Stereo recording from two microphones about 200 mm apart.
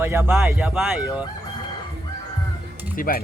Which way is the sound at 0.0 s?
10° right (ahead or behind).